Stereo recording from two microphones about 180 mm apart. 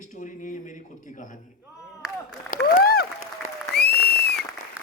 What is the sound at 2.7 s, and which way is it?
Applause, 60° left (ahead or behind).